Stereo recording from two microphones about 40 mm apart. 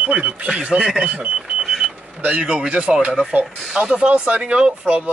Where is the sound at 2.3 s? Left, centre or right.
Right.